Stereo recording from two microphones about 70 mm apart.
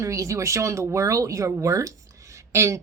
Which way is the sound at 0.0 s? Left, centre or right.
Right.